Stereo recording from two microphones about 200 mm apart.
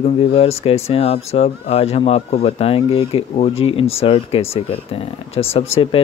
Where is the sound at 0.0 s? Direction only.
30° left (ahead or behind).